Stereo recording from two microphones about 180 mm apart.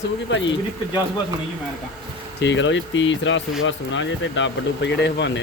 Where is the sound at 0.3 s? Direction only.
90° left.